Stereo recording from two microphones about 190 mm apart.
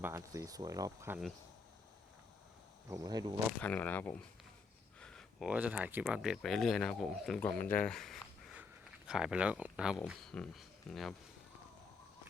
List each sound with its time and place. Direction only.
0.0 s speech: 15° right (ahead or behind)
2.9 s speech: 20° right (ahead or behind)
3.6 s speech: 10° left (ahead or behind)
4.9 s a sound: 5° left (ahead or behind)
5.5 s speech: 5° right (ahead or behind)